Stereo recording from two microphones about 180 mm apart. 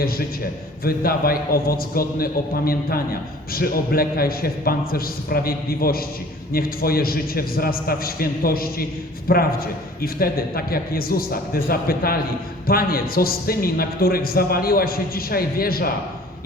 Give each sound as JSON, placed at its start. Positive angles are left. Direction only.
{"t": 0.9, "sound": "a man's voice", "side_deg": 55}